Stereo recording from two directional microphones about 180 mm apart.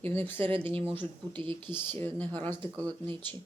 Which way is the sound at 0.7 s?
30° right (ahead or behind).